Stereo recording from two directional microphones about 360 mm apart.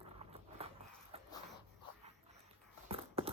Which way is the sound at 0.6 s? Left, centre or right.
Centre.